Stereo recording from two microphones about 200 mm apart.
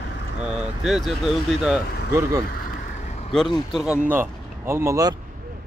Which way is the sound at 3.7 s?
Centre (ahead or behind).